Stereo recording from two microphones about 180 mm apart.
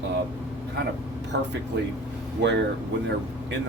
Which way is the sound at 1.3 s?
75° right (ahead or behind).